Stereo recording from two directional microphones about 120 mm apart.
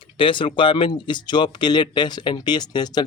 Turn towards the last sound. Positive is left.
turn(degrees=35)  # may be behind; listen again after turning